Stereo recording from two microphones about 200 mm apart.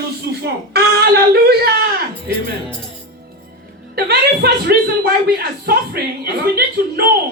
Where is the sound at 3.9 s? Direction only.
50° right (ahead or behind).